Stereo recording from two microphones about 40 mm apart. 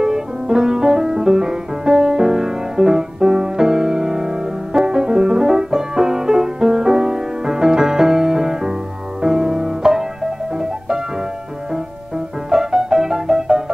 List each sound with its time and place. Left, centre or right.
0.0 s music: centre
12.4 s music: centre